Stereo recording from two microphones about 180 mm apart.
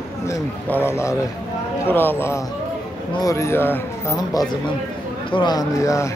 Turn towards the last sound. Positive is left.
turn(degrees=15)  # may be behind; listen again after turning